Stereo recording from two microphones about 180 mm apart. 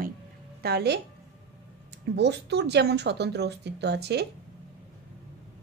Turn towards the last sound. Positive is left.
turn(degrees=-65)  # may be behind; listen again after turning